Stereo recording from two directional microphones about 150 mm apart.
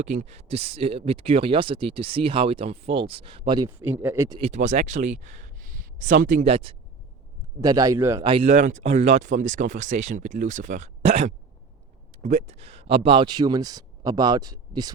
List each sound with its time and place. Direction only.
0.0 s speech: 50° right (ahead or behind); by 3.7 s 30° right (ahead or behind)
3.7 s speech: 10° right (ahead or behind)
4.4 s speech: 45° right (ahead or behind)
5.5 s a sound: 60° right (ahead or behind)
6.4 s speech: 40° right (ahead or behind)
7.6 s speech: 25° right (ahead or behind)
8.2 s speech: 35° right (ahead or behind)
8.4 s speech: 55° right (ahead or behind); by 14.9 s 25° right (ahead or behind)